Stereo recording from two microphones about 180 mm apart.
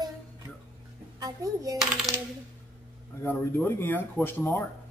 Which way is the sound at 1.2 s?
20° right (ahead or behind).